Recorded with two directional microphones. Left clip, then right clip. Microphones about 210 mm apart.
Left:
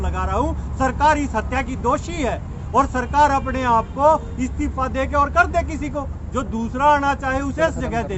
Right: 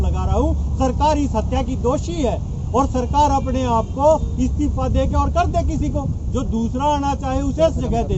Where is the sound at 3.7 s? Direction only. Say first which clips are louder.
Even; 30° left (ahead or behind).